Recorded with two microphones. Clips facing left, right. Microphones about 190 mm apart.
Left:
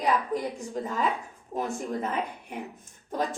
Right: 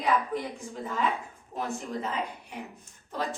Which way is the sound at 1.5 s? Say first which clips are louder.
Left 3 dB; 50° left (ahead or behind).